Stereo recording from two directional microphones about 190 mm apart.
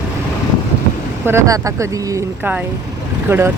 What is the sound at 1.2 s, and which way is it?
Speech, 15° right (ahead or behind).